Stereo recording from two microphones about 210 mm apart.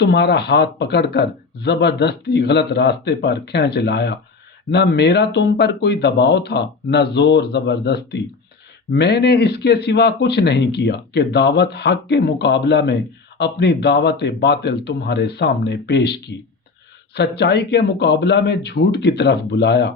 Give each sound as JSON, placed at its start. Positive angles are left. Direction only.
{"t": 0.0, "sound": "speech", "side_deg": 50}